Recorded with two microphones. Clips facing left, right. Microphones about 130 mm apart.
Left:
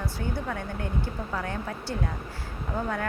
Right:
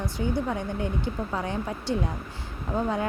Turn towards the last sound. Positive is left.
turn(degrees=-20)  # may be behind; listen again after turning